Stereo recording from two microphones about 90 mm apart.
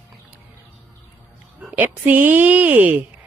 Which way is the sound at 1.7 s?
20° right (ahead or behind).